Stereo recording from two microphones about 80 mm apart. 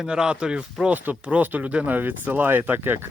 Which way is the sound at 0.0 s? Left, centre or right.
Centre.